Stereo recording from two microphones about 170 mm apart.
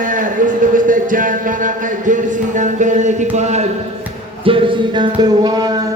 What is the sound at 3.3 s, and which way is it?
Speech, 40° right (ahead or behind).